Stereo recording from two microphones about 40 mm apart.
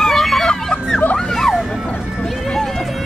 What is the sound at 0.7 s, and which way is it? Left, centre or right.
Hubbub, left.